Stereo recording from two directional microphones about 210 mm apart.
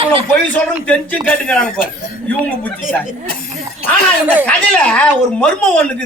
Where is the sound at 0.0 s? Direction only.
25° right (ahead or behind).